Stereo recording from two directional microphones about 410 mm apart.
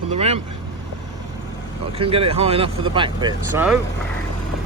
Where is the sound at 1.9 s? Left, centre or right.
Centre.